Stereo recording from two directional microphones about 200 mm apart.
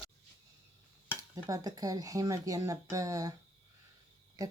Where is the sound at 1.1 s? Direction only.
15° right (ahead or behind).